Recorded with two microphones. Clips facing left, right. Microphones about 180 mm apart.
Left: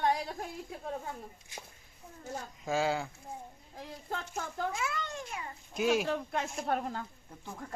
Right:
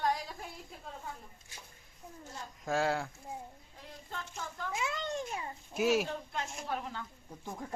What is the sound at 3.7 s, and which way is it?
Speech, 65° left (ahead or behind).